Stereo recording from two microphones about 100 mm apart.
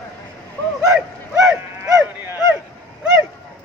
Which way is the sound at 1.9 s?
30° right (ahead or behind).